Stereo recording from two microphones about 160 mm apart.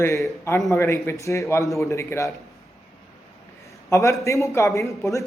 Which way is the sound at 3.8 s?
20° left (ahead or behind).